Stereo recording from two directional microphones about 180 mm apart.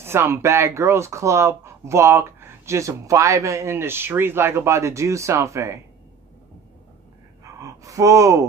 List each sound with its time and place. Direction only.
0.0 s speech: 15° right (ahead or behind)
7.4 s gasp: 20° right (ahead or behind)